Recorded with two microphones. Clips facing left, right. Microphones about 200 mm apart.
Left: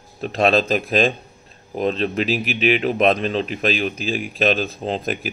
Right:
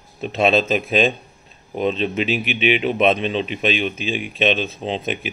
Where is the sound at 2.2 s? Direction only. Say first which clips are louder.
Left 1 dB; 40° left (ahead or behind).